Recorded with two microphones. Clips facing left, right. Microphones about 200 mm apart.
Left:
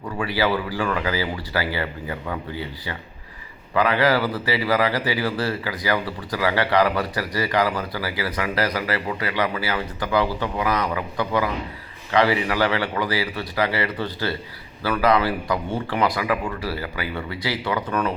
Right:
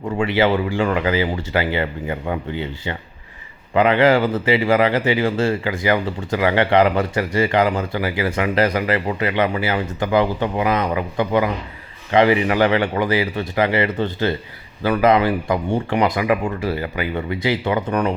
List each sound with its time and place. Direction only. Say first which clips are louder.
0.2 s speech: right 5 dB; 25° right (ahead or behind)